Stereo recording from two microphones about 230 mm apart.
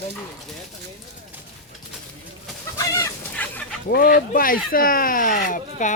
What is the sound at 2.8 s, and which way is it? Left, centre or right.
Chicken, centre.